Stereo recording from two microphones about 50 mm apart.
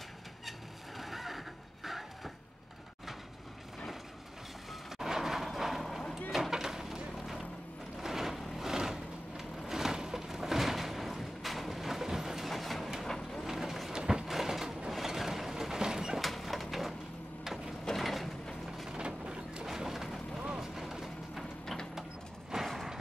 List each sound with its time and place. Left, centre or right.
0.5 s vehicle: centre
1.9 s a sound: centre
4.9 s vehicle: centre
13.5 s vehicle: centre
13.9 s a sound: centre
14.9 s vehicle: centre
16.2 s a sound: centre
18.9 s vehicle: centre
19.6 s vehicle: centre